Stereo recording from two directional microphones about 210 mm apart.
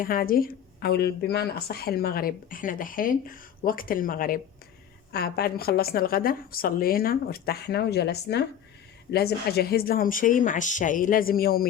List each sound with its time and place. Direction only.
0.0 s a woman's voice: 45° left (ahead or behind)